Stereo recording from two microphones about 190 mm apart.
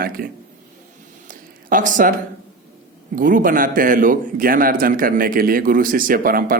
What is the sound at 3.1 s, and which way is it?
Speech, 45° right (ahead or behind).